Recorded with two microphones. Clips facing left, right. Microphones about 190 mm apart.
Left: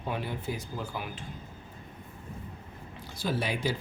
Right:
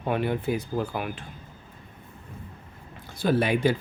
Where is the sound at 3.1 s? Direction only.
55° right (ahead or behind).